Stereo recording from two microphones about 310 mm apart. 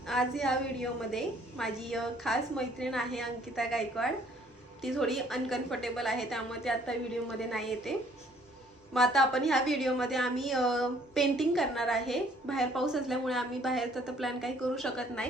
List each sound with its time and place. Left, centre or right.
0.1 s a woman's voice: centre